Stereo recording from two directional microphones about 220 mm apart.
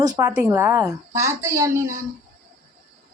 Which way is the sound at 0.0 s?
15° right (ahead or behind).